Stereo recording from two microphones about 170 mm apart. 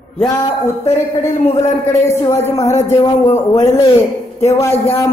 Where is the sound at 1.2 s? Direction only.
15° left (ahead or behind).